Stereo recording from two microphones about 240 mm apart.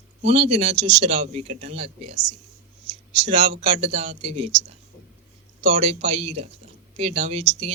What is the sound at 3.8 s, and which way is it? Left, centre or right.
Speech, right.